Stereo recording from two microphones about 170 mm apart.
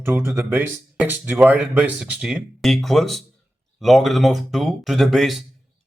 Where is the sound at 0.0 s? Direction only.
15° right (ahead or behind).